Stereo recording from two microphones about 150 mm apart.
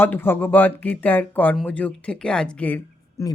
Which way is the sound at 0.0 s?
15° left (ahead or behind).